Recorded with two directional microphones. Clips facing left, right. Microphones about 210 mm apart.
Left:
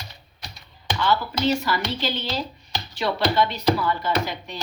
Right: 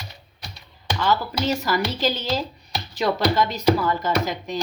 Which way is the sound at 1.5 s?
40° right (ahead or behind).